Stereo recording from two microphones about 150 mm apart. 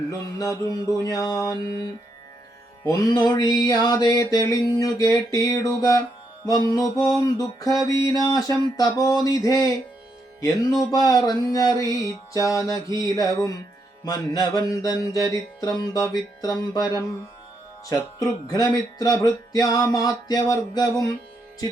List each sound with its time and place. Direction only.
0.1 s music: 20° left (ahead or behind)
2.8 s music: 25° left (ahead or behind)
10.9 s music: 25° left (ahead or behind)